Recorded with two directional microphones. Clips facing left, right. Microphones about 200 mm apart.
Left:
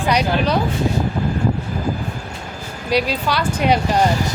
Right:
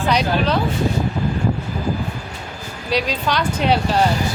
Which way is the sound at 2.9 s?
10° left (ahead or behind).